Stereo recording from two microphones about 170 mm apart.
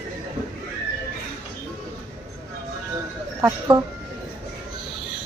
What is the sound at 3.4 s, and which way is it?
Speech, 20° right (ahead or behind).